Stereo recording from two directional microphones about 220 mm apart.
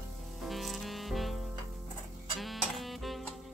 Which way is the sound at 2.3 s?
Centre (ahead or behind).